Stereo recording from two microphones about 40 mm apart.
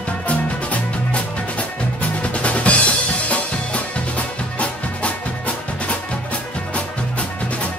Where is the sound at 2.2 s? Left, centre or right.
Left.